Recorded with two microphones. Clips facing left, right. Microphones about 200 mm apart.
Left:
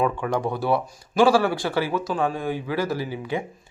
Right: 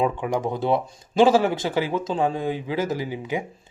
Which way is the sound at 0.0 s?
15° right (ahead or behind).